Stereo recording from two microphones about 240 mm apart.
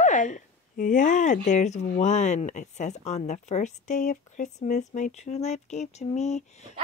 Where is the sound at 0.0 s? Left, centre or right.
Left.